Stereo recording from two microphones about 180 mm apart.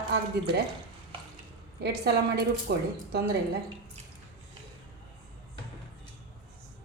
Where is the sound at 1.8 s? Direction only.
65° right (ahead or behind).